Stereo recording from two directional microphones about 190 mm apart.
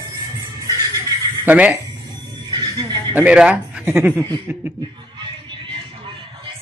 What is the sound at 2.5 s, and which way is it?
Neigh, 20° right (ahead or behind).